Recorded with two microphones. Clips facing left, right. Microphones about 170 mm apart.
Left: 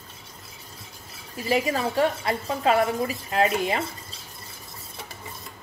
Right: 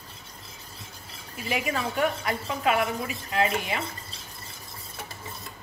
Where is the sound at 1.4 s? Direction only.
35° left (ahead or behind).